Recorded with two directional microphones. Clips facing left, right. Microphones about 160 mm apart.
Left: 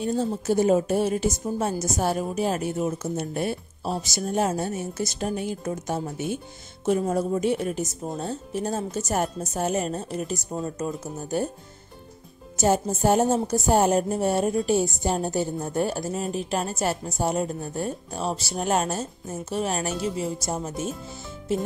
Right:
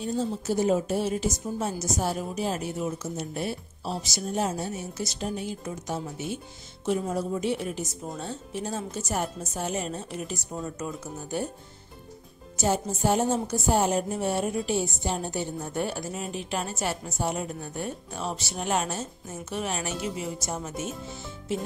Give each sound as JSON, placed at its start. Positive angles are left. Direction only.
{"t": 0.0, "sound": "a woman's voice", "side_deg": 55}
{"t": 12.5, "sound": "a woman's voice", "side_deg": 50}